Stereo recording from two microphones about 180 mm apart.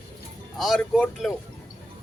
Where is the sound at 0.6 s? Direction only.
Centre (ahead or behind).